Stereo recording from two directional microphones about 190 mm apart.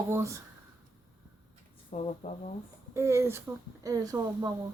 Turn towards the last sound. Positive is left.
turn(degrees=-20)  # may be behind; listen again after turning